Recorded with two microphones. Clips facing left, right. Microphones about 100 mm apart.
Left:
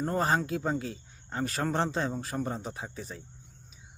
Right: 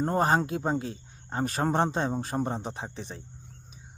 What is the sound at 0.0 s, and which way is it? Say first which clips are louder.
Speech: right 3 dB; 25° right (ahead or behind).